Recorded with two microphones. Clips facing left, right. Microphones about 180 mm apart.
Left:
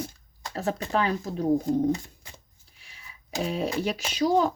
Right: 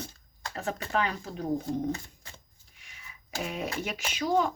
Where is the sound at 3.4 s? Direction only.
30° left (ahead or behind).